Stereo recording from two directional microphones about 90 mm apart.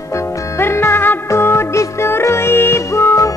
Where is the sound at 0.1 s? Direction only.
25° left (ahead or behind).